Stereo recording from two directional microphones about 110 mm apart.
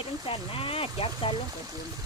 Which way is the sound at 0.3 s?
55° left (ahead or behind).